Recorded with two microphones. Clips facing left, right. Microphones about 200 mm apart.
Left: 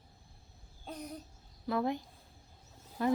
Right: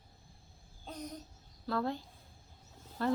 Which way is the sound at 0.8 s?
5° left (ahead or behind).